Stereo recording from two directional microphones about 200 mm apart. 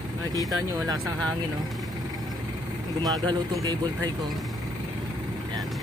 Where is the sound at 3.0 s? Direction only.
20° right (ahead or behind).